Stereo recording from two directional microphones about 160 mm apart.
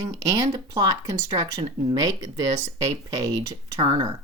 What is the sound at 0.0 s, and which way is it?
Speech, 20° right (ahead or behind).